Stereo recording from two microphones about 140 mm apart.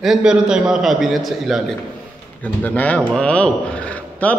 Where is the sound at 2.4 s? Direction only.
10° left (ahead or behind).